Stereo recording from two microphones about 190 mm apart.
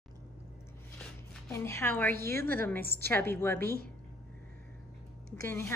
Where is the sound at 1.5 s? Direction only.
15° left (ahead or behind).